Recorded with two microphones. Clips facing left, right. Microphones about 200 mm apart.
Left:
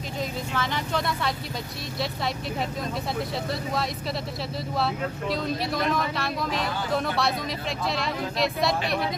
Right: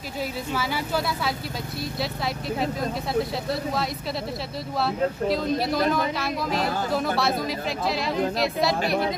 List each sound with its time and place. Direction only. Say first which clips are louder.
0.6 s speech: right 1 dB; 5° right (ahead or behind)
4.7 s speech: right 4 dB; centre (ahead or behind)